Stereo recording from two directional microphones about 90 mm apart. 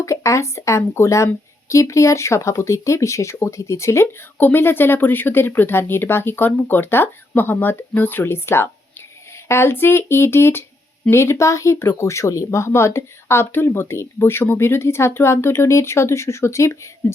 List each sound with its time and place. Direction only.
0.0 s speech: 35° left (ahead or behind)